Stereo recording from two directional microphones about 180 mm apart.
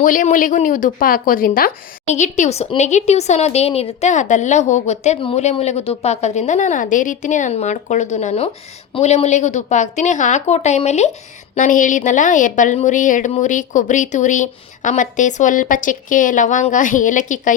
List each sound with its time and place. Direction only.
0.0 s a woman's voice: 45° left (ahead or behind)
2.1 s a woman's voice: 40° left (ahead or behind)